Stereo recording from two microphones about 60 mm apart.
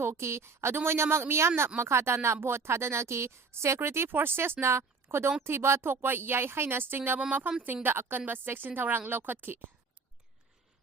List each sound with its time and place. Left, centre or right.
0.0 s a woman's voice: right
7.2 s a woman's voice: right